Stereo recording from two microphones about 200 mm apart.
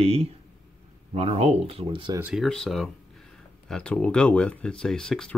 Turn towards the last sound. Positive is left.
turn(degrees=5)  # may be behind; listen again after turning